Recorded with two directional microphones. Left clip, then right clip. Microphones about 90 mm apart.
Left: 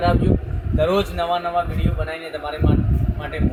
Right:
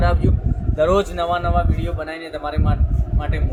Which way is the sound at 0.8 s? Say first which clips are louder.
Right 2 dB; 50° right (ahead or behind).